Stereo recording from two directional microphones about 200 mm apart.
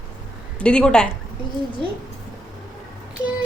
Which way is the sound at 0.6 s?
5° left (ahead or behind).